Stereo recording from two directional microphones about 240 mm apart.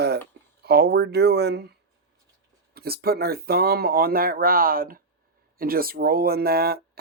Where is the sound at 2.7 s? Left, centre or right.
Right.